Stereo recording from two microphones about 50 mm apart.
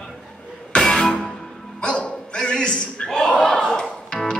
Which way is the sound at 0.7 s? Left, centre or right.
Centre.